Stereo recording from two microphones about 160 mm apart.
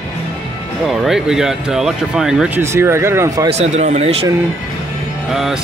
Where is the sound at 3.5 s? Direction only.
45° right (ahead or behind).